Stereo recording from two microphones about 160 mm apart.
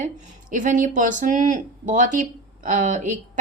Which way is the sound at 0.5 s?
55° right (ahead or behind).